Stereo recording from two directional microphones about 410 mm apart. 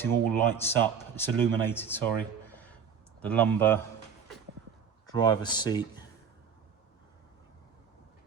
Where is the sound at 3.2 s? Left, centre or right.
Centre.